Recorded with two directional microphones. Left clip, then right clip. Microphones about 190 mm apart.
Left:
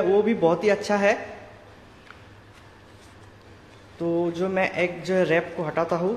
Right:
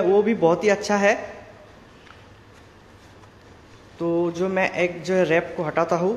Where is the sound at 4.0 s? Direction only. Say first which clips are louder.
Right 2 dB; 10° right (ahead or behind).